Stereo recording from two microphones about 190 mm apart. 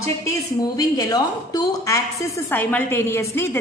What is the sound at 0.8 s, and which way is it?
A woman's voice, 20° left (ahead or behind).